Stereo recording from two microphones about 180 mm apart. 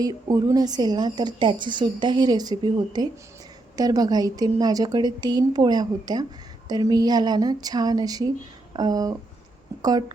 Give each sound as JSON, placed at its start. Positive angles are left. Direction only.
{"t": 0.0, "sound": "a woman's voice", "side_deg": -20}